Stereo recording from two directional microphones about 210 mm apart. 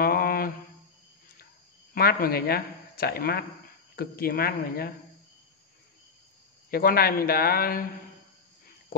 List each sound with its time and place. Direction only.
0.0 s mantra: 45° left (ahead or behind)
2.0 s speech: 45° left (ahead or behind)
6.7 s speech: 45° left (ahead or behind)